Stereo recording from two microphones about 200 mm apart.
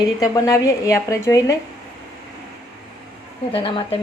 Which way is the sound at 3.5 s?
25° left (ahead or behind).